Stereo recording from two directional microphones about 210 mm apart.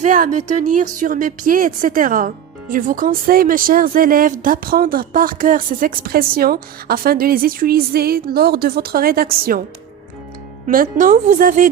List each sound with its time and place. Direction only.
0.0 s a woman's voice: 35° right (ahead or behind)
10.7 s a woman's voice: 40° right (ahead or behind)